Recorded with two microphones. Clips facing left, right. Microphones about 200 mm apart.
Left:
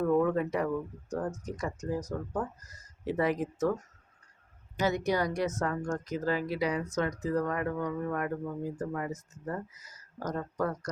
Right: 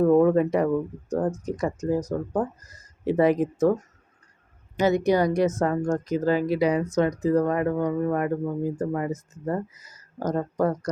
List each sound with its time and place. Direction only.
0.0 s speech: 30° right (ahead or behind)
0.7 s speech: 35° right (ahead or behind)
1.5 s speech: 25° right (ahead or behind)
3.0 s speech: 20° right (ahead or behind)
4.8 s speech: 20° right (ahead or behind)
5.5 s speech: 35° right (ahead or behind)
6.1 s speech: 20° right (ahead or behind)